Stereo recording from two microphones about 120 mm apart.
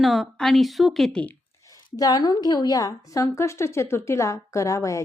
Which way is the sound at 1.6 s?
30° left (ahead or behind).